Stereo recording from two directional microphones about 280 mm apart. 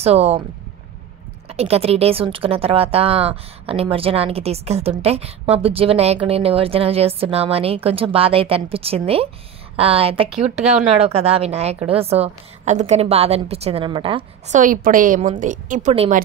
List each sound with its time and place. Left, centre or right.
0.0 s a woman's voice: right
1.5 s a woman's voice: right